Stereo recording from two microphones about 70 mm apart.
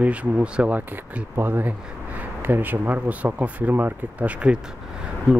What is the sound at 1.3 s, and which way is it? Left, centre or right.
Speech, right.